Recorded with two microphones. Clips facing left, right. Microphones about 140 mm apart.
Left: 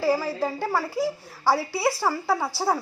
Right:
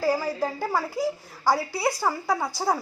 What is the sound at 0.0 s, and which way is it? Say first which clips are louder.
A woman's voice: left 1 dB; centre (ahead or behind).